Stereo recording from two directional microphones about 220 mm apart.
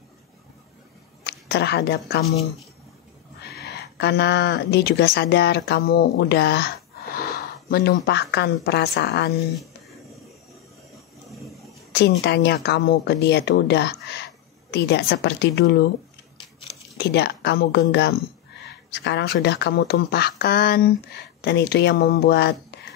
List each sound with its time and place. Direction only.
1.2 s a woman's voice: 50° left (ahead or behind)
3.5 s speech: 50° left (ahead or behind)
11.9 s speech: 50° left (ahead or behind)
17.0 s speech: 50° left (ahead or behind)